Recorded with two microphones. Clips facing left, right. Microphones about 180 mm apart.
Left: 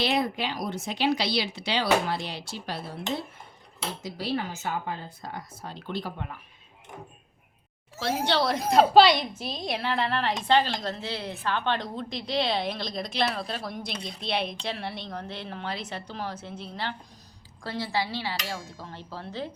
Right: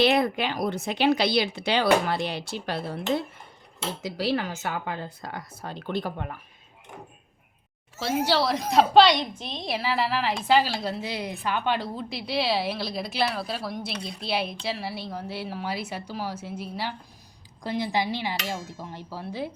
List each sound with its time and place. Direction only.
0.0 s speech: 60° right (ahead or behind)
4.0 s a woman's voice: 85° right; by 6.3 s 50° right (ahead or behind)
8.2 s a woman's voice: 5° right (ahead or behind)